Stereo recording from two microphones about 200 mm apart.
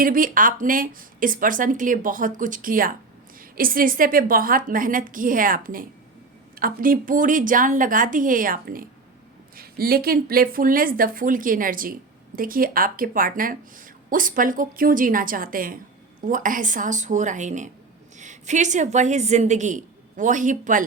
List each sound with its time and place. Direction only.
0.0 s a woman's voice: 45° right (ahead or behind)